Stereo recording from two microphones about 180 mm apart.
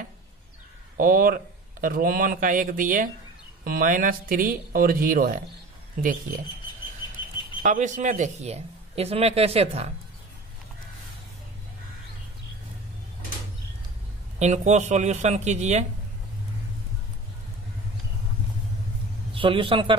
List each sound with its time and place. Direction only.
0.9 s speech: 50° right (ahead or behind)
7.6 s a man's voice: 45° right (ahead or behind)
14.4 s a man's voice: 40° right (ahead or behind)
19.3 s a man's voice: 30° right (ahead or behind)